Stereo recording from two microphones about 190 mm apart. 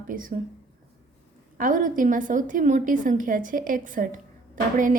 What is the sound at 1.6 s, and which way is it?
A woman's voice, 45° right (ahead or behind).